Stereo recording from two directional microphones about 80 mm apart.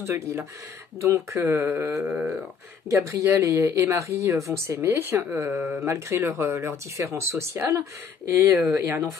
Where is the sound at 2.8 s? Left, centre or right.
Right.